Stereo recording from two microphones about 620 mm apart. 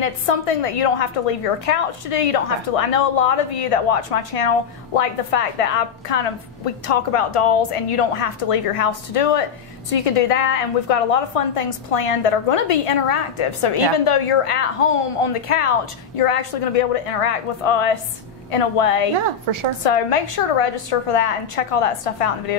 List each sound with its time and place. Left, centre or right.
0.0 s a woman's voice: left
19.1 s a woman's voice: right
19.8 s a woman's voice: left